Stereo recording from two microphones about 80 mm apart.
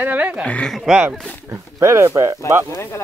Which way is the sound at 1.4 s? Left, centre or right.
Right.